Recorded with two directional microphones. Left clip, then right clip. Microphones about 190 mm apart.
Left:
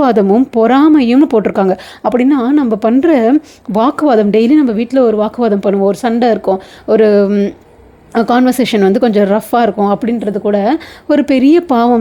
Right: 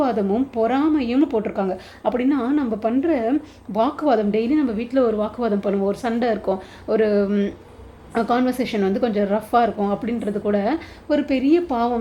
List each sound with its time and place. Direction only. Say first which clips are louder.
0.0 s speech: left 11 dB; 50° left (ahead or behind); by 7.5 s 35° left (ahead or behind)
8.1 s speech: left 9 dB; 45° left (ahead or behind)